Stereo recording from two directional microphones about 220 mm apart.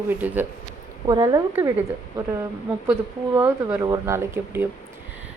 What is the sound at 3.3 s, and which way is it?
A woman's voice, 10° right (ahead or behind).